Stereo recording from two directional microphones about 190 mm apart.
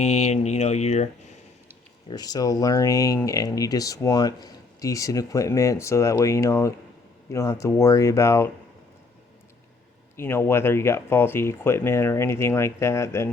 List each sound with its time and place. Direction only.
0.0 s speech: 35° left (ahead or behind)
2.0 s speech: 20° left (ahead or behind)
10.2 s speech: 15° left (ahead or behind)